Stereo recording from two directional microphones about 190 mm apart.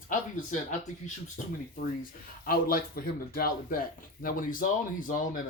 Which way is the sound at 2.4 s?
50° left (ahead or behind).